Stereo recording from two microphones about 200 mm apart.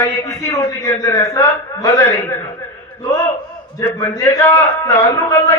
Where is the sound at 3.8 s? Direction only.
15° left (ahead or behind).